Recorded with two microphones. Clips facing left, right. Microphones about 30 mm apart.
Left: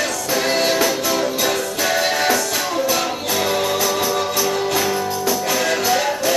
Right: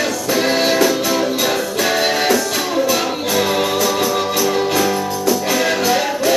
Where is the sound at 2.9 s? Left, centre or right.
Centre.